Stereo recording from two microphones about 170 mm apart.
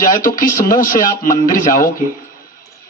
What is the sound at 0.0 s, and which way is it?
A man's voice, 50° left (ahead or behind).